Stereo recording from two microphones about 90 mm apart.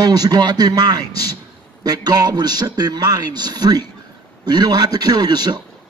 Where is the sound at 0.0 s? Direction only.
45° right (ahead or behind).